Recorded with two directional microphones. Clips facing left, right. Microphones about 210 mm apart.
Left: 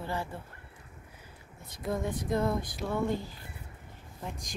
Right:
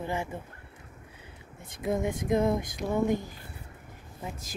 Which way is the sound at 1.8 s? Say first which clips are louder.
Right 4 dB; 20° right (ahead or behind).